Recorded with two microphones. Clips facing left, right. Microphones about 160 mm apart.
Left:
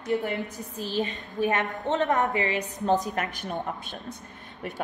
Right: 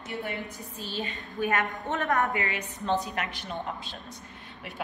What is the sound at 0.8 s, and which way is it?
Speech, 40° left (ahead or behind).